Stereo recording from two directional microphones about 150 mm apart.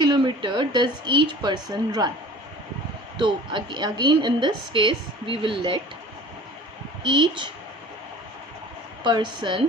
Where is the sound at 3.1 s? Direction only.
30° right (ahead or behind).